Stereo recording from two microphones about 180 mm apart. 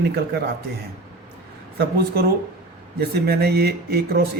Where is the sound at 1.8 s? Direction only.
60° right (ahead or behind).